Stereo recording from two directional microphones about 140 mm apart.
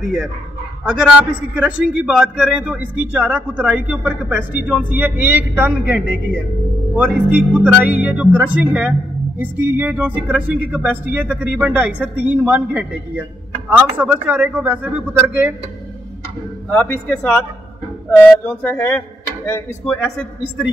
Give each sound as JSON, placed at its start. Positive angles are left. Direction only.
{"t": 0.8, "sound": "speech", "side_deg": -5}
{"t": 16.7, "sound": "speech", "side_deg": 10}
{"t": 19.9, "sound": "speech", "side_deg": 5}